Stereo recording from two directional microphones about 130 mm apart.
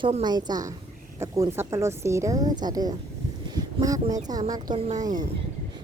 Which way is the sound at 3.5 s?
30° right (ahead or behind).